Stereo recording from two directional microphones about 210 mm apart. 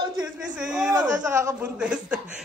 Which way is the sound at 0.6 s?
5° right (ahead or behind).